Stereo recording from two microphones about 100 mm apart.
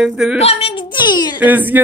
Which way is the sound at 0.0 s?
10° right (ahead or behind).